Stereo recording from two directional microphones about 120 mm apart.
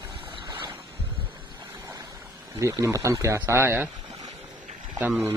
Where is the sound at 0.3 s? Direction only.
40° right (ahead or behind).